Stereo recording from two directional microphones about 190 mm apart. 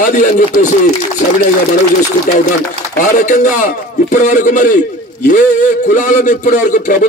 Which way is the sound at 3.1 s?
40° left (ahead or behind).